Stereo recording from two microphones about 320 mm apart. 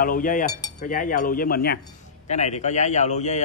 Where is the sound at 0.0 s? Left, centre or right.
Left.